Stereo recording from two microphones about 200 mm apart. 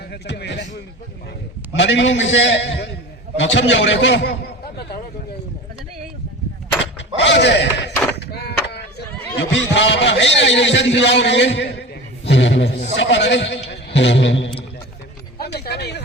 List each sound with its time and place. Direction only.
0.1 s a man's voice: 55° left (ahead or behind)
1.7 s a man's voice: 65° left (ahead or behind)
7.2 s speech: 60° left (ahead or behind)
8.1 s a sound: 55° left (ahead or behind)
9.4 s a man's voice: 60° left (ahead or behind)
15.4 s a sound: 50° left (ahead or behind)